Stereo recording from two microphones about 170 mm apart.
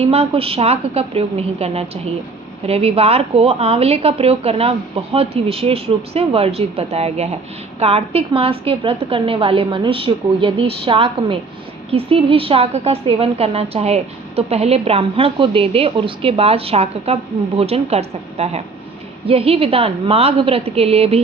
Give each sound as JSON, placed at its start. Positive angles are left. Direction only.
{"t": 0.0, "sound": "a woman's voice", "side_deg": -35}